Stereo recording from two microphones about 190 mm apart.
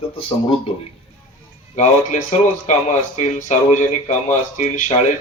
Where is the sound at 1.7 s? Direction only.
40° left (ahead or behind).